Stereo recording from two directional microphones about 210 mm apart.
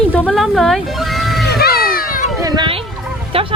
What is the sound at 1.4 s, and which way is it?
Cat, 50° left (ahead or behind).